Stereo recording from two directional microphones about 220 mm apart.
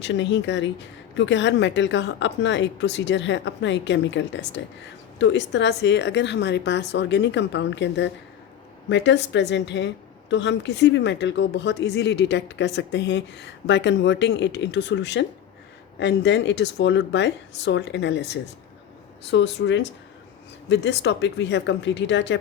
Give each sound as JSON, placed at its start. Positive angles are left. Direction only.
{"t": 0.0, "sound": "a woman's voice", "side_deg": 55}